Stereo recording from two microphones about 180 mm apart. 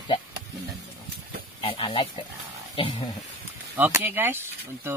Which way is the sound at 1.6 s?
30° left (ahead or behind).